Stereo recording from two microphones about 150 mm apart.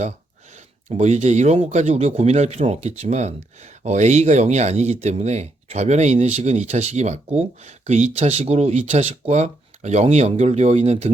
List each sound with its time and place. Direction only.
0.5 s speech: 50° right (ahead or behind)